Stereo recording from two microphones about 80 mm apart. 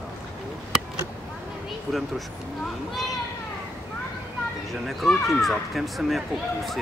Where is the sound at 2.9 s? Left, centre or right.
Centre.